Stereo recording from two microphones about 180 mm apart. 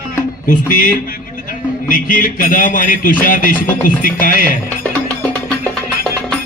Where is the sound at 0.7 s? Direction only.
50° left (ahead or behind).